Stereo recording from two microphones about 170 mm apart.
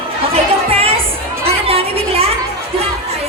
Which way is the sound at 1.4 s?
35° right (ahead or behind).